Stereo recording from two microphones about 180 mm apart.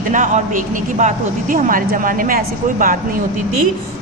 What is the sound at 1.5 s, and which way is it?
A woman's voice, 50° right (ahead or behind).